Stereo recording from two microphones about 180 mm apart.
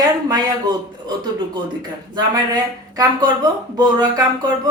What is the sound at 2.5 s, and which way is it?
A woman's voice, 20° right (ahead or behind).